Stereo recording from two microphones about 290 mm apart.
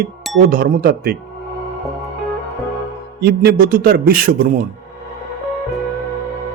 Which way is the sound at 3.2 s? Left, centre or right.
Right.